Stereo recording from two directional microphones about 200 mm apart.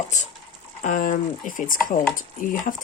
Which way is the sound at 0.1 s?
35° left (ahead or behind).